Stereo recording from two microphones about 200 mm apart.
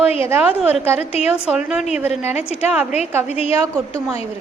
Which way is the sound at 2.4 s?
30° left (ahead or behind).